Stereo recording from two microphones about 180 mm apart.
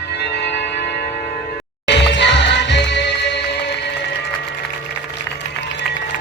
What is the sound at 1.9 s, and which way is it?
Music, 75° left (ahead or behind).